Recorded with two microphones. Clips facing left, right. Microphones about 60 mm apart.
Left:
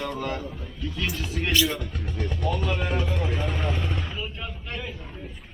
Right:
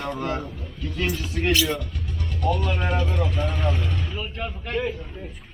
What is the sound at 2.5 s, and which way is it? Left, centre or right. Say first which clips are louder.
Speech: right 2 dB; centre.